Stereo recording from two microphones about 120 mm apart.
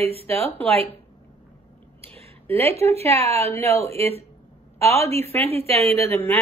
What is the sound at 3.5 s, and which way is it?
Speech, 25° left (ahead or behind).